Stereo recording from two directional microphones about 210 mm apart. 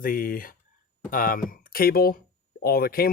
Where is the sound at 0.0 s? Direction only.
45° left (ahead or behind).